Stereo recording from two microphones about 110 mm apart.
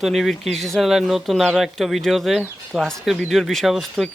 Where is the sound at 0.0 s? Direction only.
Centre (ahead or behind).